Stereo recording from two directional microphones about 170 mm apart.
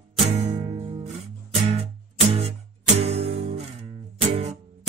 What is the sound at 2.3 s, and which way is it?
Music, 35° right (ahead or behind).